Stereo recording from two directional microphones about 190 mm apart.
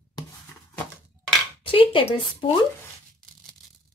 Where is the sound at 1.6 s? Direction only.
30° left (ahead or behind).